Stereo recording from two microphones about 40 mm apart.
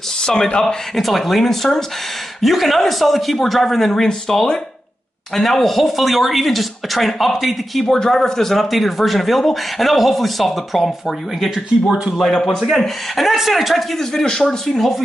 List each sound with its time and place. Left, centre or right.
0.2 s speech: centre
0.9 s speech: centre
7.9 s speech: centre
12.2 s speech: centre
12.5 s speech: centre
13.9 s speech: centre